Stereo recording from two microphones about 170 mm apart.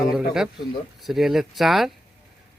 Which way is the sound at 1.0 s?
Centre (ahead or behind).